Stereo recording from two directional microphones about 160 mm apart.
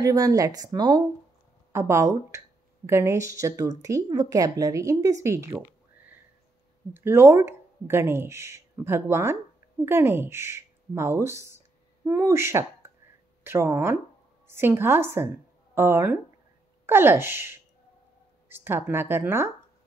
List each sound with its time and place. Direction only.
0.0 s speech: 20° right (ahead or behind)